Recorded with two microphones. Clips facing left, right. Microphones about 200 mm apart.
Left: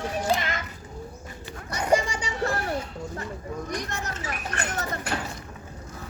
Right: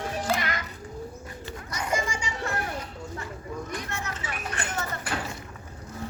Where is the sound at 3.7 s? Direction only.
40° left (ahead or behind).